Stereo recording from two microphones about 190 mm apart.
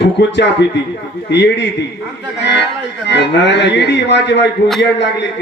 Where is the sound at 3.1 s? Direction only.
65° left (ahead or behind).